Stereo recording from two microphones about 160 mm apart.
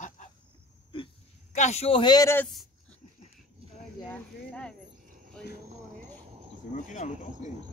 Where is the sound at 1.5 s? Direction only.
45° left (ahead or behind); by 2.4 s 25° left (ahead or behind).